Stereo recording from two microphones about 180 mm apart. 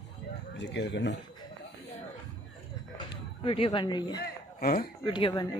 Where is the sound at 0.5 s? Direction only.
75° left (ahead or behind).